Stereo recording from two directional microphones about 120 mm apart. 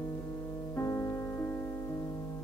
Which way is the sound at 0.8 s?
25° left (ahead or behind).